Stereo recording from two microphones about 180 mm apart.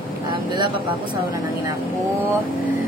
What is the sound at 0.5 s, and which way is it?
Speech, 25° right (ahead or behind).